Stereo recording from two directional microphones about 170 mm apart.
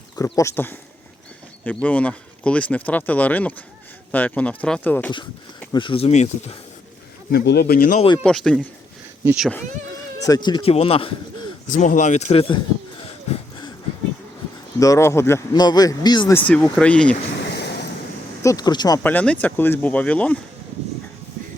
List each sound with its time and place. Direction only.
0.3 s speech: 20° left (ahead or behind)
5.7 s speech: 30° left (ahead or behind)
7.3 s speech: 70° left (ahead or behind)
8.2 s speech: 5° left (ahead or behind)
10.2 s speech: 25° left (ahead or behind)
11.7 s speech: 50° left (ahead or behind); by 12.5 s 35° left (ahead or behind)
14.8 s speech: 20° left (ahead or behind)
16.3 s speech: 10° left (ahead or behind)
17.4 s waves: 80° left
18.4 s speech: 25° left (ahead or behind)
19.0 s speech: 10° left (ahead or behind)